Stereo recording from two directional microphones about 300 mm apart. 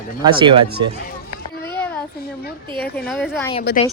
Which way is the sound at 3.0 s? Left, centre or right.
Centre.